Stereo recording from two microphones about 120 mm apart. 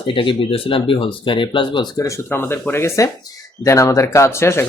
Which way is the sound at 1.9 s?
25° left (ahead or behind).